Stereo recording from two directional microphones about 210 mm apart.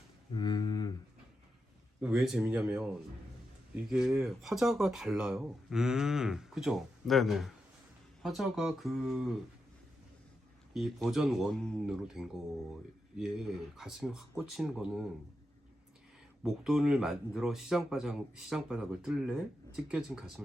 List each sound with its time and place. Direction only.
0.3 s a sound: 20° left (ahead or behind)
2.0 s speech: 5° right (ahead or behind)
3.8 s speech: 5° right (ahead or behind)
10.8 s speech: centre (ahead or behind)
16.4 s speech: centre (ahead or behind)